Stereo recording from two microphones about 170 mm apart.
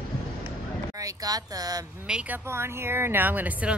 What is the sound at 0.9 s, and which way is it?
Speech, 20° right (ahead or behind).